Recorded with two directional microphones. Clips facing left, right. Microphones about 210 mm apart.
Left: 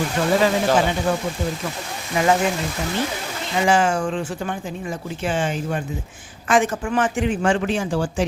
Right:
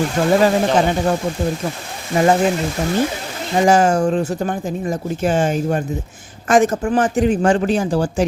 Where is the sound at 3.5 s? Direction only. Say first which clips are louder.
Right 5 dB; 40° right (ahead or behind).